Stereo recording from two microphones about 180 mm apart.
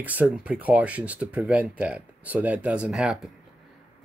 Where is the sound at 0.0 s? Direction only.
10° right (ahead or behind).